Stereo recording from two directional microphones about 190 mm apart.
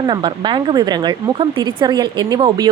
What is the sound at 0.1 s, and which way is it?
A woman's voice, 25° right (ahead or behind).